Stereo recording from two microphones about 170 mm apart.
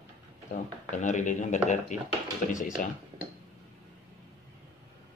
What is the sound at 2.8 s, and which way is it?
Speech, 55° left (ahead or behind).